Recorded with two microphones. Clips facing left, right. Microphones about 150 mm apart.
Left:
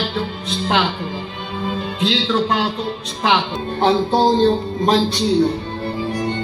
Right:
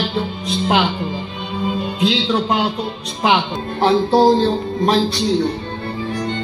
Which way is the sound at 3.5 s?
Centre (ahead or behind).